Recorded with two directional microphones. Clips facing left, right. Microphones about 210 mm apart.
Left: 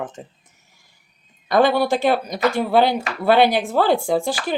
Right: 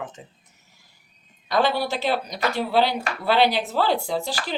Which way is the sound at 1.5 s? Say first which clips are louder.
Left 6 dB; 50° left (ahead or behind).